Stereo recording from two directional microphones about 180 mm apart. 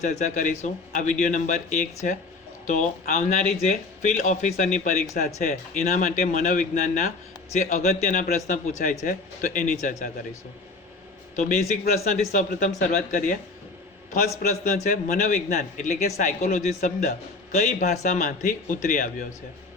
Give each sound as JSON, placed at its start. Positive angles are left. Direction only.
{"t": 0.0, "sound": "a man's voice", "side_deg": 40}
{"t": 11.3, "sound": "speech", "side_deg": 45}